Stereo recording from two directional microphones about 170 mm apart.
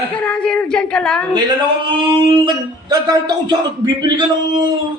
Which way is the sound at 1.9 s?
30° right (ahead or behind).